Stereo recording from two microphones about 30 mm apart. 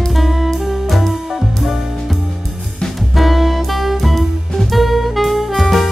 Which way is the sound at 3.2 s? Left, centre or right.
Centre.